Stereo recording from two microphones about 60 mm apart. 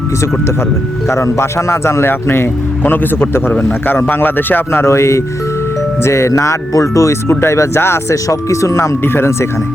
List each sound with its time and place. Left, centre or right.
1.0 s speech: left
4.9 s speech: left
9.0 s speech: left